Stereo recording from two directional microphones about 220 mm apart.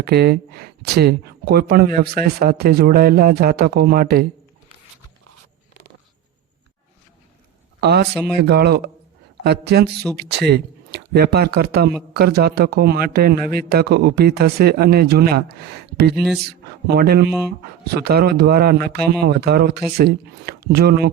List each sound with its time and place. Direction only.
0.0 s speech: 45° right (ahead or behind)
7.8 s speech: 45° right (ahead or behind)
16.1 s speech: 5° right (ahead or behind)
16.4 s speech: 45° right (ahead or behind)